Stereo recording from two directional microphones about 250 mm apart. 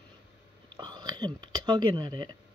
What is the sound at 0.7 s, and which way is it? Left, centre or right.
Speech, centre.